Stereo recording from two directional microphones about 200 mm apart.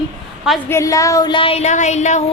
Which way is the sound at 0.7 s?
15° left (ahead or behind).